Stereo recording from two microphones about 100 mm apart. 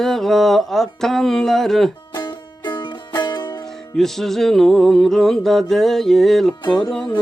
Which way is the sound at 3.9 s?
5° left (ahead or behind).